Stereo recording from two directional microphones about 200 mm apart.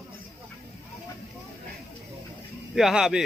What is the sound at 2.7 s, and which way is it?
Speech, centre (ahead or behind).